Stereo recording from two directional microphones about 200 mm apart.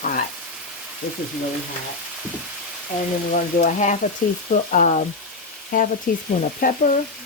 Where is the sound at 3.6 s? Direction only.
40° left (ahead or behind).